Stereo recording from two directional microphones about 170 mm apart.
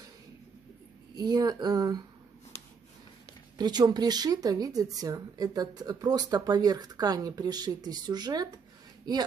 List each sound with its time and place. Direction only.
1.1 s speech: 25° right (ahead or behind)
3.5 s speech: 25° right (ahead or behind)